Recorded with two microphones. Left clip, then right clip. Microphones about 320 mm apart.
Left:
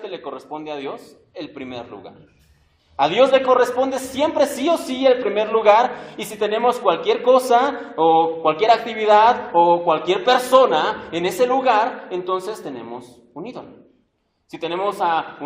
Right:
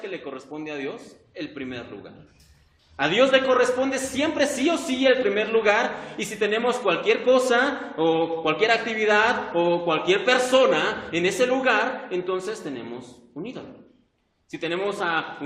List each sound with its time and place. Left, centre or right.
0.3 s a man's voice: centre
3.0 s a man's voice: centre
14.5 s a man's voice: centre